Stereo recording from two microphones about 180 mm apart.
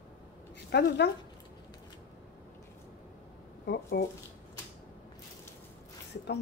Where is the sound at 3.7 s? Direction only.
65° left (ahead or behind).